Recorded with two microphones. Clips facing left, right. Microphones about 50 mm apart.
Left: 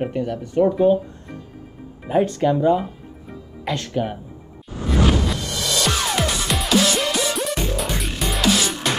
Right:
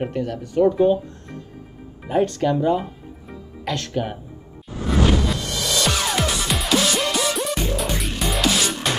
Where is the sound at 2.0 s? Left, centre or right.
Centre.